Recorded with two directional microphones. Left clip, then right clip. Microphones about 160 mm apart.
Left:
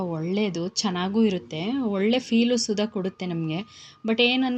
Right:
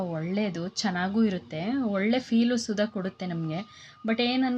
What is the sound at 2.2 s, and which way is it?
A woman's voice, 15° left (ahead or behind).